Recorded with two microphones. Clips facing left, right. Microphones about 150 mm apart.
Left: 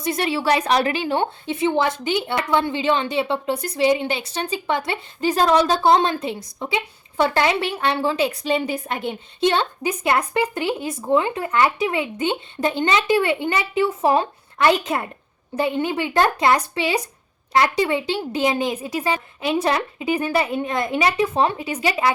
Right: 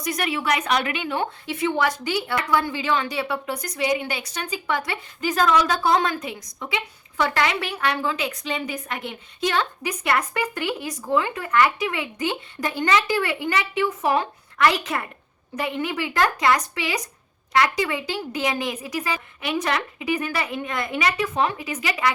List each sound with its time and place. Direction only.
0.0 s a woman's voice: 30° left (ahead or behind)